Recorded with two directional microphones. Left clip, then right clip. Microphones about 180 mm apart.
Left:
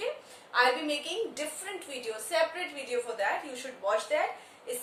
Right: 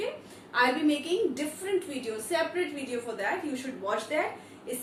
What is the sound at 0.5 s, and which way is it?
A woman's voice, 20° left (ahead or behind).